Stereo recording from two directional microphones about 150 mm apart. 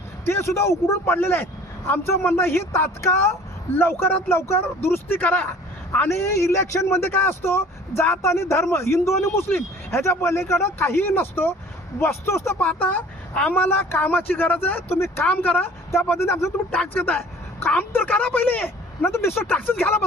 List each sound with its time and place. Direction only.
0.3 s speech: 15° left (ahead or behind)